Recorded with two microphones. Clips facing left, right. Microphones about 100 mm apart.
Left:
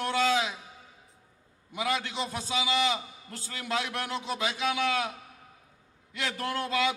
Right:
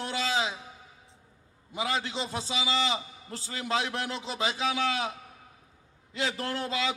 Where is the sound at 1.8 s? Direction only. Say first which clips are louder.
Even; 30° right (ahead or behind).